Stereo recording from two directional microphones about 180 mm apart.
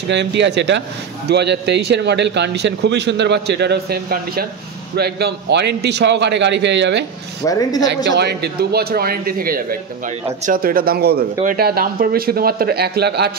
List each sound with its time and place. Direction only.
0.1 s a man's voice: 75° right (ahead or behind)
7.4 s speech: 15° left (ahead or behind)
7.9 s a man's voice: 70° right (ahead or behind)